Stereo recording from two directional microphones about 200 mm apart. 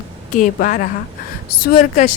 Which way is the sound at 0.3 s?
40° left (ahead or behind).